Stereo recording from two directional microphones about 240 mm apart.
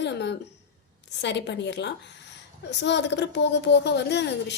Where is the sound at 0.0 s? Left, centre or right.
Left.